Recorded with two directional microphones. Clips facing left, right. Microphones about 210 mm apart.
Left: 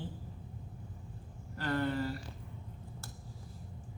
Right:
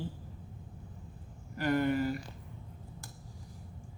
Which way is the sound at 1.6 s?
10° right (ahead or behind).